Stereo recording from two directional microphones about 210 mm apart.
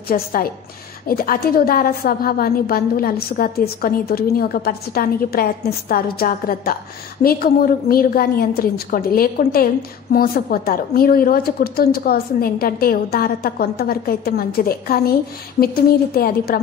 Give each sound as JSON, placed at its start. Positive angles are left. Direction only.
{"t": 0.1, "sound": "a woman's voice", "side_deg": 45}
{"t": 16.2, "sound": "a woman's voice", "side_deg": 45}